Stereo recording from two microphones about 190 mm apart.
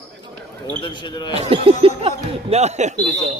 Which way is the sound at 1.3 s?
30° right (ahead or behind).